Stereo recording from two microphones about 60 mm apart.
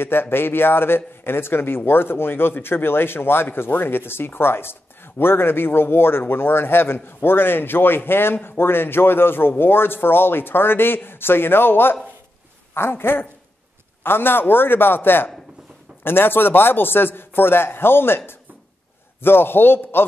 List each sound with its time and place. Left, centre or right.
0.0 s speech: left